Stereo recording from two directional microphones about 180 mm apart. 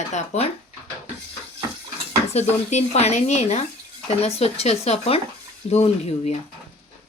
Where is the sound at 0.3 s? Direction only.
40° left (ahead or behind).